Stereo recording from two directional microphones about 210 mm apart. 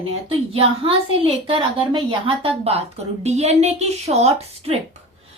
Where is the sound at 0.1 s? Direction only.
30° right (ahead or behind).